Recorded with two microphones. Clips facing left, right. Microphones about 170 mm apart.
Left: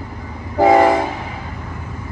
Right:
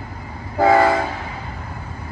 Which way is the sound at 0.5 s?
20° left (ahead or behind).